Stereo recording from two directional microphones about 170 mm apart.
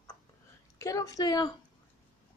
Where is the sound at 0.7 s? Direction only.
20° left (ahead or behind).